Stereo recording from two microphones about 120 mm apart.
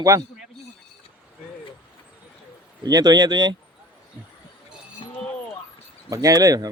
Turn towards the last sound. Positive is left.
turn(degrees=-30)  # may be behind; listen again after turning